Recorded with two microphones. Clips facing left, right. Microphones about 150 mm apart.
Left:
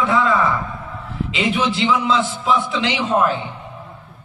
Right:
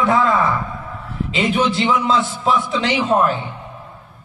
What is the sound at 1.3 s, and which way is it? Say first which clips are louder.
A man's voice: right 2 dB; 45° right (ahead or behind).